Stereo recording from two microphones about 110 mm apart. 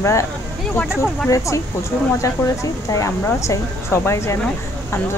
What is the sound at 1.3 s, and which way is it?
Speech, 25° left (ahead or behind).